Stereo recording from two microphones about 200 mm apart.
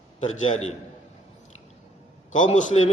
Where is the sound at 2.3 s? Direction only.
35° left (ahead or behind).